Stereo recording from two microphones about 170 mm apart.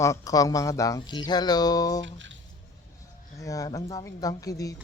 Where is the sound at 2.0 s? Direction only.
90° right.